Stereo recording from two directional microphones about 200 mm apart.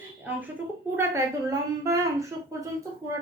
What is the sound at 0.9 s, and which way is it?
A woman's voice, 15° right (ahead or behind).